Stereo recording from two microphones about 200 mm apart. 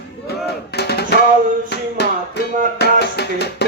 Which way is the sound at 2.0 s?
55° left (ahead or behind).